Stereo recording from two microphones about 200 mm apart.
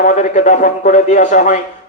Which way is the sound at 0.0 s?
40° left (ahead or behind).